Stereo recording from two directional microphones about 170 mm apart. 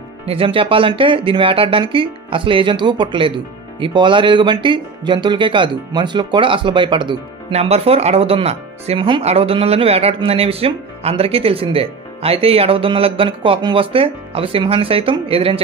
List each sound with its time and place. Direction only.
0.3 s speech: 30° right (ahead or behind)